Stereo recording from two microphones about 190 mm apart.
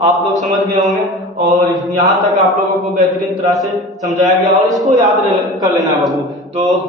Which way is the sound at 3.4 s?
Centre (ahead or behind).